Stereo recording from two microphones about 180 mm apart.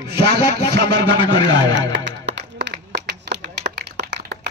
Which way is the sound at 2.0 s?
75° right (ahead or behind).